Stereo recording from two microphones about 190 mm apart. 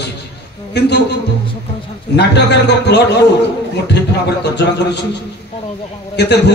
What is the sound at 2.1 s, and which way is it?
Speech, 65° left (ahead or behind).